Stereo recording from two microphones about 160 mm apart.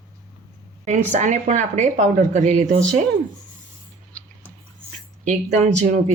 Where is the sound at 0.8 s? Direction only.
50° right (ahead or behind).